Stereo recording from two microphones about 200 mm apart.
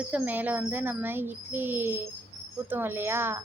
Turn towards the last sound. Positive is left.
turn(degrees=-10)  # may be behind; listen again after turning